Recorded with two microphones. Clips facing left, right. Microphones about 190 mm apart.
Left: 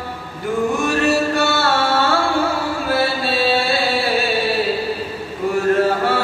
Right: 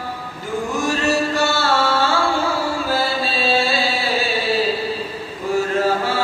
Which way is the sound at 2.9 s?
60° left (ahead or behind).